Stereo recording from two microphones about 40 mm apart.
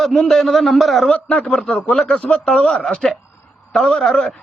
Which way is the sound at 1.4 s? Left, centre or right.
Left.